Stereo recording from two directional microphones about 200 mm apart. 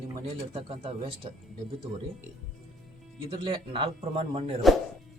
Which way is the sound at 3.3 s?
25° right (ahead or behind).